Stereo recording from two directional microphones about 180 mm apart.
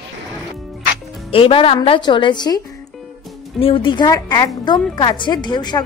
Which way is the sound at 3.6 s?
30° left (ahead or behind).